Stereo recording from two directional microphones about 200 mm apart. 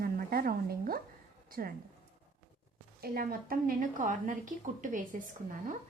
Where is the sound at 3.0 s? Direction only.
50° right (ahead or behind).